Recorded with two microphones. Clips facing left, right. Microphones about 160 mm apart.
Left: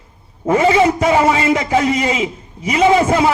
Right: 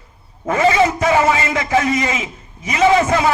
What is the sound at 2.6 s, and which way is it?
Speech, 30° left (ahead or behind).